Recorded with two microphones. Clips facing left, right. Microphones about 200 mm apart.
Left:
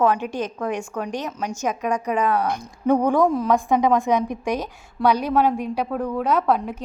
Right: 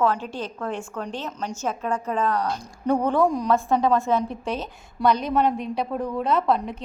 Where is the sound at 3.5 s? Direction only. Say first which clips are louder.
Left 2 dB; 15° left (ahead or behind).